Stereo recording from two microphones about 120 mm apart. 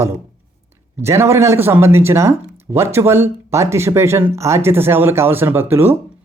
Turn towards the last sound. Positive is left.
turn(degrees=-20)  # may be behind; listen again after turning